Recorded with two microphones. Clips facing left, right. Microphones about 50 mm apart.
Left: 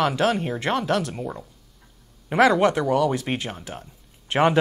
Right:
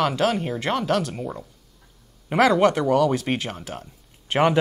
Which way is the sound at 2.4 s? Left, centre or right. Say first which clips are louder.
Even; left.